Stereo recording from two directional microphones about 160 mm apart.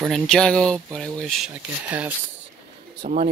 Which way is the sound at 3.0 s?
60° right (ahead or behind).